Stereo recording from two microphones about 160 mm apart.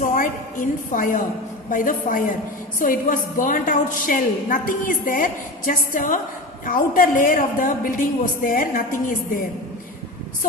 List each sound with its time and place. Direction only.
0.0 s a woman's voice: 55° left (ahead or behind)